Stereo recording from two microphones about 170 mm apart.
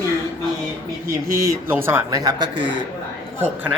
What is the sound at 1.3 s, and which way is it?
Speech, 20° right (ahead or behind).